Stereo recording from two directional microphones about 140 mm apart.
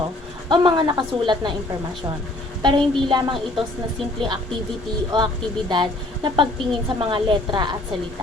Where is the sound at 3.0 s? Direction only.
35° right (ahead or behind).